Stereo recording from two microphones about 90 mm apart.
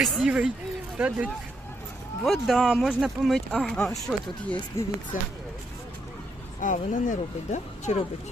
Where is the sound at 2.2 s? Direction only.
Centre (ahead or behind).